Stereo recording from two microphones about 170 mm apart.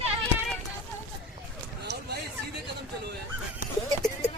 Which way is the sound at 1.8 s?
75° right (ahead or behind).